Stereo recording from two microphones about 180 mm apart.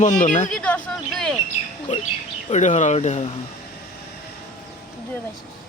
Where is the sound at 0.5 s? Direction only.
5° left (ahead or behind).